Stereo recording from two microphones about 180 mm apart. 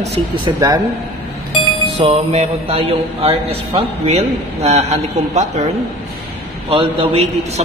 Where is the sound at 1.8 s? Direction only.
35° right (ahead or behind).